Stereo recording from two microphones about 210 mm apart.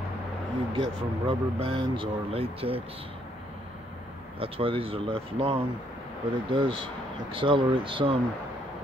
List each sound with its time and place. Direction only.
0.7 s speech: 25° right (ahead or behind)
4.4 s speech: 25° right (ahead or behind)